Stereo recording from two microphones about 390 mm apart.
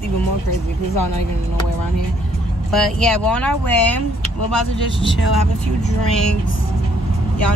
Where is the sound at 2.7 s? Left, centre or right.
Centre.